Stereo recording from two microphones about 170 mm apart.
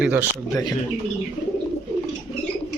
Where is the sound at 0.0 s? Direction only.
10° right (ahead or behind).